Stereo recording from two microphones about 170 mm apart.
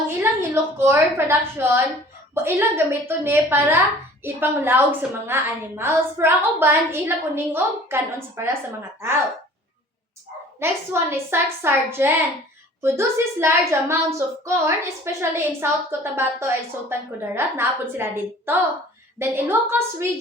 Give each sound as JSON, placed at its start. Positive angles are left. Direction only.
{"t": 0.2, "sound": "a woman's voice", "side_deg": -15}
{"t": 10.6, "sound": "a woman's voice", "side_deg": -15}